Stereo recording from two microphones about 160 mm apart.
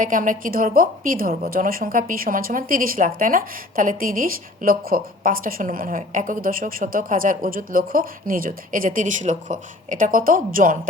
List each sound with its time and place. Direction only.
0.0 s a woman's voice: 55° right (ahead or behind)